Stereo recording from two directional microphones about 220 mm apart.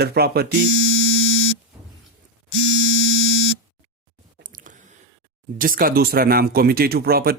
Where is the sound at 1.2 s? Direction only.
65° left (ahead or behind).